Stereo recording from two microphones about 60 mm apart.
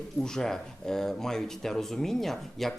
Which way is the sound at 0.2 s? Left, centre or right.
Centre.